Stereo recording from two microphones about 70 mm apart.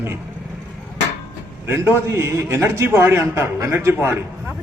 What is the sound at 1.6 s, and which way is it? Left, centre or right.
A man's voice, right.